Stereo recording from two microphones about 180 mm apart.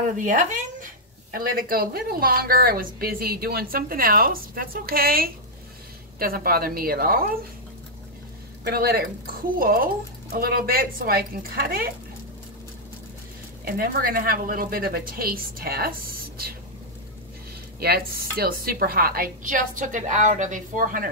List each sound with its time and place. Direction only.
0.2 s speech: 45° right (ahead or behind)
8.6 s speech: 60° right (ahead or behind)
13.7 s speech: 55° right (ahead or behind)
17.7 s a woman's voice: 60° right (ahead or behind)